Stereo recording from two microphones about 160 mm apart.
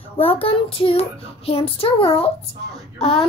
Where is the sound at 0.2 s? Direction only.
35° left (ahead or behind).